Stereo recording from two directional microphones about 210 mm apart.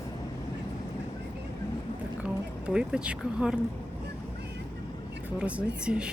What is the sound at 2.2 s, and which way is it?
A woman's voice, 5° right (ahead or behind).